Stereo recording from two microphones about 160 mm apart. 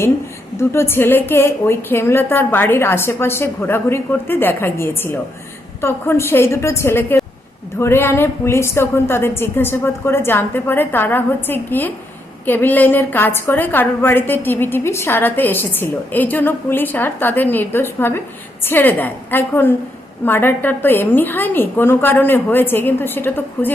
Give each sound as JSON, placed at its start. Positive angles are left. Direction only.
{"t": 0.5, "sound": "a woman's voice", "side_deg": 15}